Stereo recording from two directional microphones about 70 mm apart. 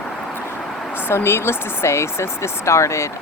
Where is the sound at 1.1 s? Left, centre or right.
Left.